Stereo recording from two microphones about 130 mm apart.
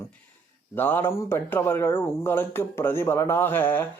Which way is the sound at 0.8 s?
15° left (ahead or behind).